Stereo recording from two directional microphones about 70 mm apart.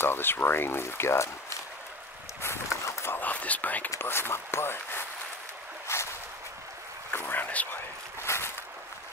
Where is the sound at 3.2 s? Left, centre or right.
Left.